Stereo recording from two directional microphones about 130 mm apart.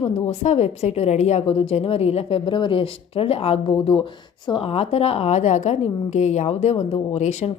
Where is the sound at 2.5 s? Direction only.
40° left (ahead or behind).